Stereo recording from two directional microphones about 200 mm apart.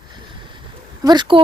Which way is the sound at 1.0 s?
20° right (ahead or behind).